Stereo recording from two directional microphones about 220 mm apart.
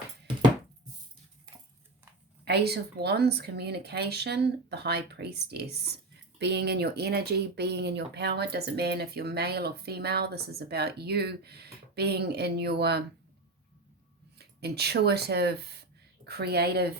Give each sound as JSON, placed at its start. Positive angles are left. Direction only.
{"t": 2.4, "sound": "speech", "side_deg": -50}
{"t": 14.3, "sound": "speech", "side_deg": -45}